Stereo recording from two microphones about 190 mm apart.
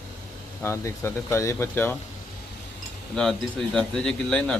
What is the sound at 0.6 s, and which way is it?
Speech, 15° left (ahead or behind).